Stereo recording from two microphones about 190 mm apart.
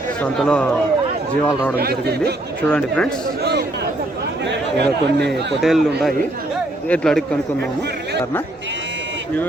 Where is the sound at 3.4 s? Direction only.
60° right (ahead or behind).